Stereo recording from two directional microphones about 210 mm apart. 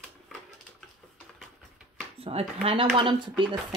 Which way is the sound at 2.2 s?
25° right (ahead or behind).